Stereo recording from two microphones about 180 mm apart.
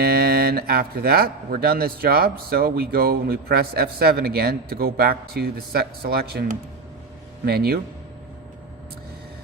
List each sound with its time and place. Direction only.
0.0 s speech: 60° right (ahead or behind)